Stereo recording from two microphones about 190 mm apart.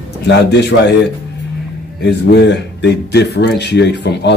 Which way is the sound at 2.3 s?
65° left (ahead or behind).